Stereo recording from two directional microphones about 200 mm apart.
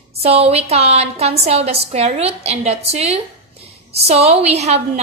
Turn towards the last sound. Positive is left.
turn(degrees=-30)  # may be behind; listen again after turning